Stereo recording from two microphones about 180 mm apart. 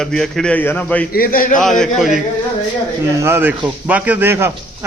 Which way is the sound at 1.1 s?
55° left (ahead or behind).